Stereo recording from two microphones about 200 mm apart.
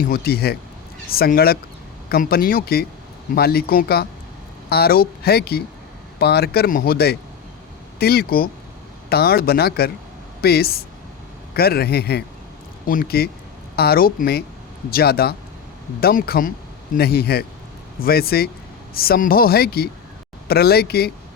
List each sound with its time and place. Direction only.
0.0 s speech: 50° left (ahead or behind)